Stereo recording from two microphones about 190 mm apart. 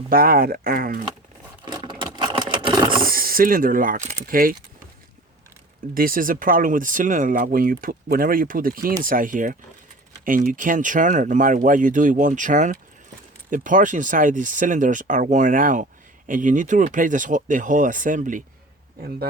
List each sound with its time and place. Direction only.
0.1 s speech: 50° right (ahead or behind)
1.6 s a sound: 25° right (ahead or behind)
3.0 s speech: 50° right (ahead or behind)
5.9 s speech: 50° right (ahead or behind)